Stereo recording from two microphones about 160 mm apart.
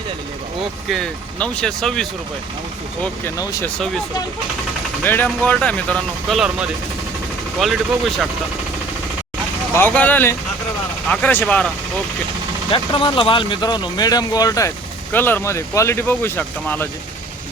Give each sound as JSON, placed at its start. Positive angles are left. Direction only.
{"t": 0.9, "sound": "speech", "side_deg": 5}
{"t": 3.0, "sound": "speech", "side_deg": 20}
{"t": 5.0, "sound": "speech", "side_deg": 10}
{"t": 9.7, "sound": "speech", "side_deg": 10}
{"t": 12.7, "sound": "speech", "side_deg": 30}